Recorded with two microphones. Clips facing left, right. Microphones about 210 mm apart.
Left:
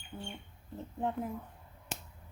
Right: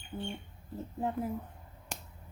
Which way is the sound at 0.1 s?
25° right (ahead or behind).